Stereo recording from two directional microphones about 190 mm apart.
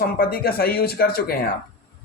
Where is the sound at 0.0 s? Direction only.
50° left (ahead or behind).